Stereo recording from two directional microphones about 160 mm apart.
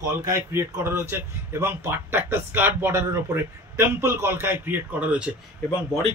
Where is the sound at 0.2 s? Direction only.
15° right (ahead or behind).